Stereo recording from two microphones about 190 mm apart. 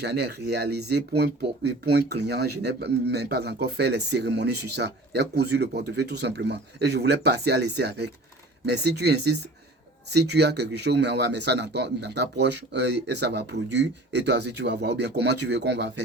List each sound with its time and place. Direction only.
0.0 s speech: 60° right (ahead or behind)